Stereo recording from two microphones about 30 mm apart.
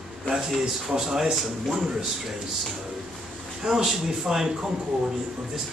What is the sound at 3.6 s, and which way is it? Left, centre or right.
Speech, centre.